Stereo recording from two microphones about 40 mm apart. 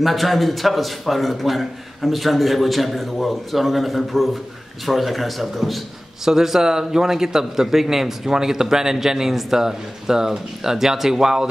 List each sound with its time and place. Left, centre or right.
0.0 s a man's voice: centre
6.2 s a man's voice: centre